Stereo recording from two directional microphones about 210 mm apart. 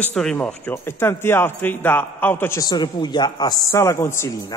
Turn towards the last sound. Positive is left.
turn(degrees=15)  # may be behind; listen again after turning